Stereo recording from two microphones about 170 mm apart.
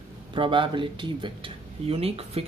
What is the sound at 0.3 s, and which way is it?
Speech, 30° right (ahead or behind).